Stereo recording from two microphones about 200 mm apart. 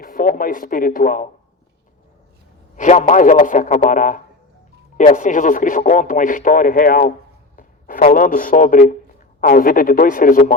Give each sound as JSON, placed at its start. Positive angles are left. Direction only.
{"t": 0.0, "sound": "speech", "side_deg": 45}
{"t": 2.7, "sound": "a man's voice", "side_deg": 35}
{"t": 7.5, "sound": "a sound", "side_deg": 45}
{"t": 8.0, "sound": "a man's voice", "side_deg": 40}